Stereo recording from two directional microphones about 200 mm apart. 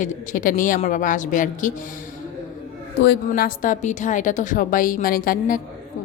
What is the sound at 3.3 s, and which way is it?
A woman's voice, 45° left (ahead or behind).